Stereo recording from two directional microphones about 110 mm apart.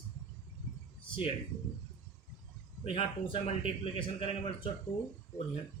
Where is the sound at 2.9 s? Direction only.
60° left (ahead or behind).